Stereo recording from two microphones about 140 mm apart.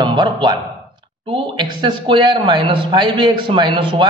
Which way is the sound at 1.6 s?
35° right (ahead or behind).